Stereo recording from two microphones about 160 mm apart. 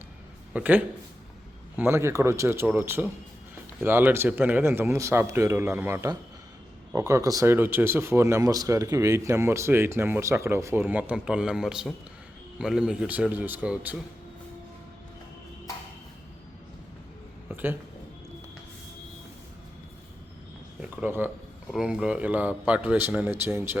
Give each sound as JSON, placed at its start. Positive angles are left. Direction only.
{"t": 0.5, "sound": "speech", "side_deg": -10}
{"t": 17.5, "sound": "a sound", "side_deg": -15}
{"t": 20.8, "sound": "speech", "side_deg": -10}